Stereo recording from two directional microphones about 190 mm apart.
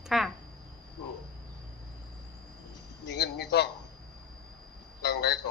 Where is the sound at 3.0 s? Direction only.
65° left (ahead or behind).